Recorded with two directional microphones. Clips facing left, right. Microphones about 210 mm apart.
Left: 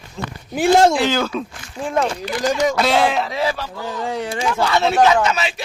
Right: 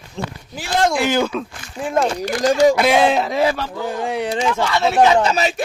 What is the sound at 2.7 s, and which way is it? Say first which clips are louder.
Speech: right 2 dB; 15° right (ahead or behind).